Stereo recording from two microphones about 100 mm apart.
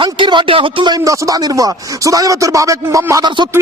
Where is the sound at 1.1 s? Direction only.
35° right (ahead or behind).